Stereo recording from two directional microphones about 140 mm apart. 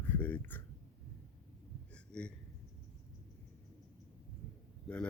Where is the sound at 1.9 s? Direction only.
5° left (ahead or behind).